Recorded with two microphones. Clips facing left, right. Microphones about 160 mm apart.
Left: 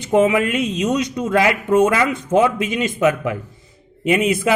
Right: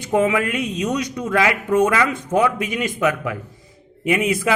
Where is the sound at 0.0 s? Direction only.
20° left (ahead or behind).